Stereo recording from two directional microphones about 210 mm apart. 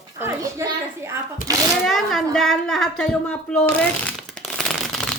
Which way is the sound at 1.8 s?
Centre (ahead or behind).